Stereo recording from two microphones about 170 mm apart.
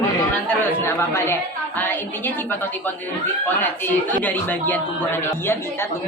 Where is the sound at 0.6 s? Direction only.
15° left (ahead or behind).